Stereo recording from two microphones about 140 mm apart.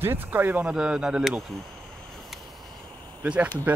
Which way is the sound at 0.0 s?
15° right (ahead or behind).